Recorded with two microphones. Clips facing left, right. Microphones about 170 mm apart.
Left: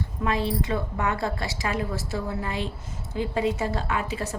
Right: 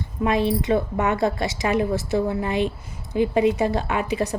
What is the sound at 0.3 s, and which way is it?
A woman's voice, 20° right (ahead or behind).